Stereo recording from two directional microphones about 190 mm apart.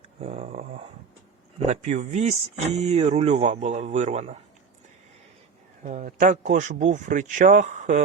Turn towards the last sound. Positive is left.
turn(degrees=-40)  # may be behind; listen again after turning